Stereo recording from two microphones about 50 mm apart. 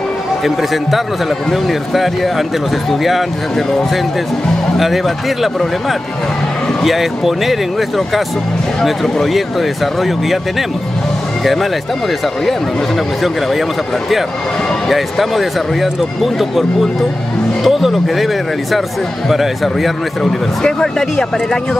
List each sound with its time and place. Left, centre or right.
1.5 s speech: centre
4.7 s speech: centre
8.8 s speech: centre
13.2 s speech: centre
14.9 s speech: centre
20.6 s speech: centre